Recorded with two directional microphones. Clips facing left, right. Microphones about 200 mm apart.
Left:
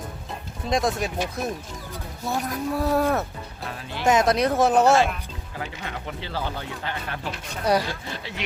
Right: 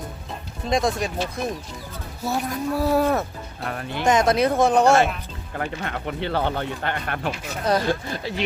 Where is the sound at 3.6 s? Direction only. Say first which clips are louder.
Right 5 dB; 55° right (ahead or behind).